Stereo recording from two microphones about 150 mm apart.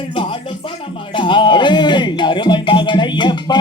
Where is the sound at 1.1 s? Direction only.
35° left (ahead or behind).